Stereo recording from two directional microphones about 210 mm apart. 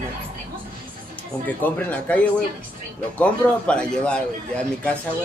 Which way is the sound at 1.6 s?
5° left (ahead or behind).